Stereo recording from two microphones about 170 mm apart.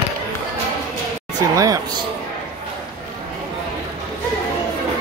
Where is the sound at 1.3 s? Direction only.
20° right (ahead or behind).